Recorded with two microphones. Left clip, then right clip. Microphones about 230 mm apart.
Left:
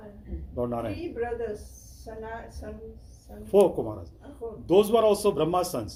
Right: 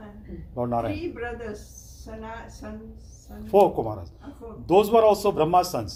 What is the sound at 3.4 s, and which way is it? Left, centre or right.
A man's voice, right.